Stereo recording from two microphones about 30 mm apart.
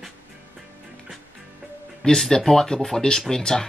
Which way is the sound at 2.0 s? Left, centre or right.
Left.